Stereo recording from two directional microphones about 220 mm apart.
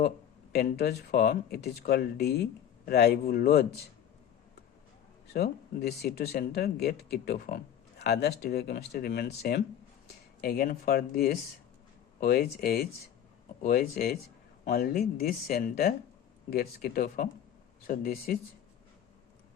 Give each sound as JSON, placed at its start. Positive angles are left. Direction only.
{"t": 0.5, "sound": "speech", "side_deg": 45}
{"t": 5.3, "sound": "speech", "side_deg": 45}